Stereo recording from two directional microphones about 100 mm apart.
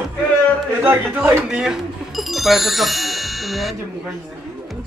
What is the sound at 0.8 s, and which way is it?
Speech, 20° right (ahead or behind).